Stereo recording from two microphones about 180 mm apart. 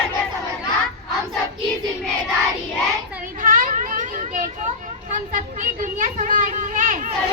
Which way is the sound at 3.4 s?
50° right (ahead or behind).